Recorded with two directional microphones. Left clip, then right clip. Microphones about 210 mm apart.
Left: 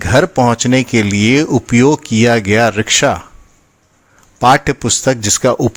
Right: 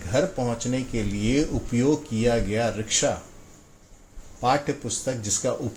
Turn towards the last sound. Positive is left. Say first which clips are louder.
# left 14 dB
turn(degrees=45)  # may be behind; listen again after turning